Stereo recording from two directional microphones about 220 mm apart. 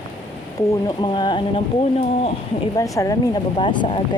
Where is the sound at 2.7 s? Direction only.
15° left (ahead or behind).